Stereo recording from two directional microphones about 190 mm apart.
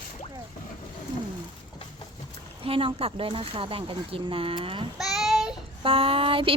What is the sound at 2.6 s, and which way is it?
Speech, 30° right (ahead or behind).